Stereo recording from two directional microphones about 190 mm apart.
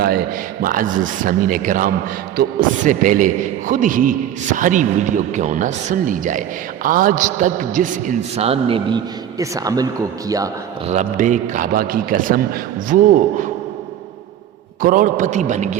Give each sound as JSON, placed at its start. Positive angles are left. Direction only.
{"t": 0.0, "sound": "a man's voice", "side_deg": -55}
{"t": 9.4, "sound": "speech", "side_deg": -20}
{"t": 10.8, "sound": "a man's voice", "side_deg": -40}
{"t": 14.8, "sound": "a man's voice", "side_deg": -45}